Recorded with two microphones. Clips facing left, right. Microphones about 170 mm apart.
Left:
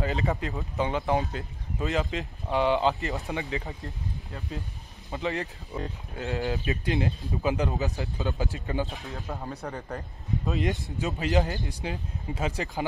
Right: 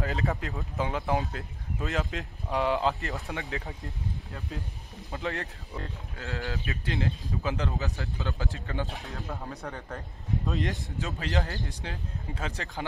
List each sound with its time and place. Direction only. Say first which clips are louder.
0.0 s speech: left 2 dB; centre (ahead or behind)
5.7 s speech: left 4 dB; 20° left (ahead or behind)
8.8 s speech: left 1 dB; centre (ahead or behind)
10.7 s speech: left 4 dB; 15° left (ahead or behind)